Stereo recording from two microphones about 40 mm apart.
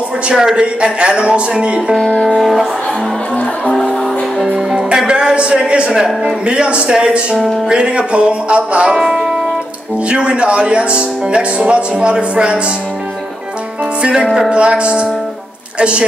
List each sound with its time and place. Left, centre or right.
0.3 s a woman's voice: centre
0.9 s speech: right
2.2 s speech: centre
4.9 s a sound: right
6.2 s speech: right
8.9 s music: centre
10.0 s speech: right
14.5 s speech: right